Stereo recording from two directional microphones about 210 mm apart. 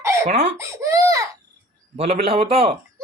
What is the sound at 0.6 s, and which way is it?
Baby cry, 15° right (ahead or behind).